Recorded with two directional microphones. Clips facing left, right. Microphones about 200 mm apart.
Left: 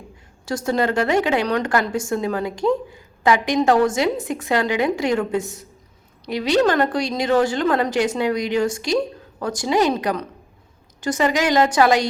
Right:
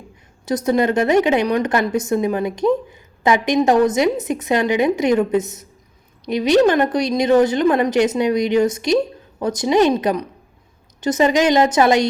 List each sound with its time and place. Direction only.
0.4 s a woman's voice: 20° right (ahead or behind)